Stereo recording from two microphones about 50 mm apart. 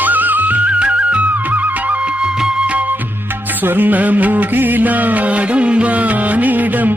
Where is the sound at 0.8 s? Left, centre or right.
Right.